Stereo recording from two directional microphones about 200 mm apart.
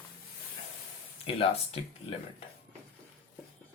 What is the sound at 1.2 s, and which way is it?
Speech, 30° left (ahead or behind).